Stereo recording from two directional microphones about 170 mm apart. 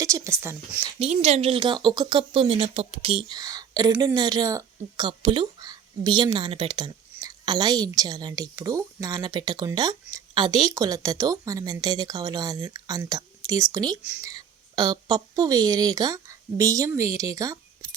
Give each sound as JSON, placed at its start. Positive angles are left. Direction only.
{"t": 0.0, "sound": "a woman's voice", "side_deg": -15}
{"t": 0.9, "sound": "speech", "side_deg": -40}